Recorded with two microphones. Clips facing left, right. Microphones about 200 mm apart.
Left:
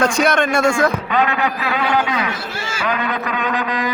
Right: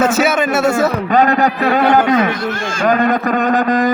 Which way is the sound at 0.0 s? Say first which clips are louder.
Right 2 dB; 5° right (ahead or behind).